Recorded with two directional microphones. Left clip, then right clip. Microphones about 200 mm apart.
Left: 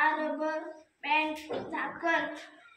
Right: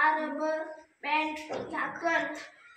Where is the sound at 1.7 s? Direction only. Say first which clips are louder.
Right 1 dB; 5° left (ahead or behind).